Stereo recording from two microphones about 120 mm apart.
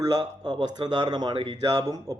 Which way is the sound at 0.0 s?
30° right (ahead or behind).